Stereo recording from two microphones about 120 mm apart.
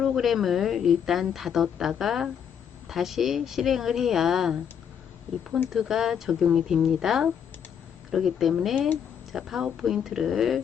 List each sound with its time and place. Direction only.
0.0 s a woman's voice: centre (ahead or behind)
5.7 s a woman's voice: 5° right (ahead or behind)